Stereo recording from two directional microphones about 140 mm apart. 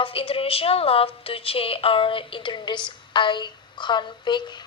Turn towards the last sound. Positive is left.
turn(degrees=30)  # may be behind; listen again after turning